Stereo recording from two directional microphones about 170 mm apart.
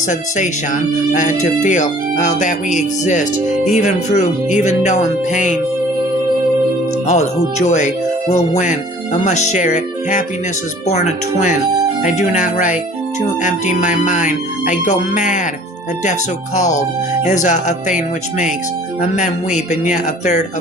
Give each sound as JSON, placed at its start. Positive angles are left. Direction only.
{"t": 0.1, "sound": "music", "side_deg": 45}
{"t": 7.1, "sound": "music", "side_deg": 45}
{"t": 17.2, "sound": "music", "side_deg": 45}